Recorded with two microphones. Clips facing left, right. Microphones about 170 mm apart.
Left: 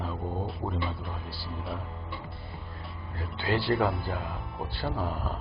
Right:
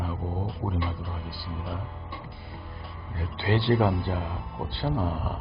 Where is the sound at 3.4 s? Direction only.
20° right (ahead or behind).